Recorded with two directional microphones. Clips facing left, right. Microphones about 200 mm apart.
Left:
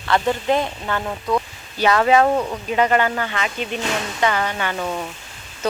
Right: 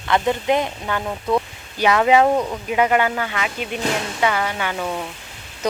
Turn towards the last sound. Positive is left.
turn(degrees=-5)  # may be behind; listen again after turning